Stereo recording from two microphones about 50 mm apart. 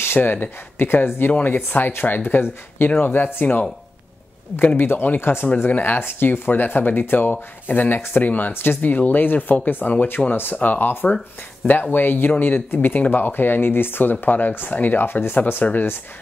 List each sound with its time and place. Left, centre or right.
0.0 s speech: left
4.7 s speech: left
15.6 s speech: left